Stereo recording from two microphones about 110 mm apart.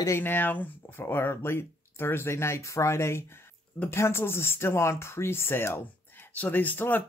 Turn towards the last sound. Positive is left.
turn(degrees=15)  # may be behind; listen again after turning